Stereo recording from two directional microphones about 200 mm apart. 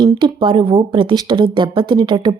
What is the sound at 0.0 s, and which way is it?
A woman's voice, 25° right (ahead or behind).